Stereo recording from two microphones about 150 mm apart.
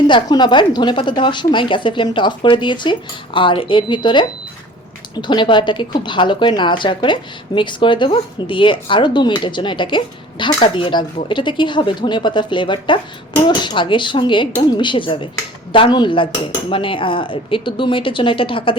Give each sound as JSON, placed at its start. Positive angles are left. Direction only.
{"t": 0.1, "sound": "a woman's voice", "side_deg": 30}